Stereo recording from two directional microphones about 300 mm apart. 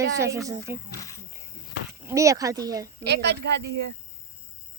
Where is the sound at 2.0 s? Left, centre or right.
Centre.